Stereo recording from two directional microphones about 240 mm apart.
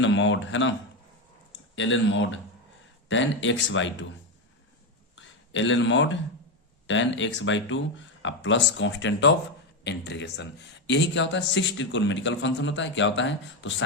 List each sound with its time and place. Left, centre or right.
0.0 s speech: left
1.7 s speech: left
5.1 s speech: left